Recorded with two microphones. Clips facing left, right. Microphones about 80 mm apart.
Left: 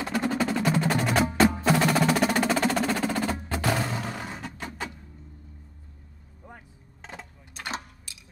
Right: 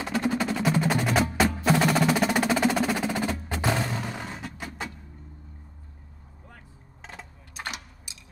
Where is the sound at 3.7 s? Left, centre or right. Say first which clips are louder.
Even; centre.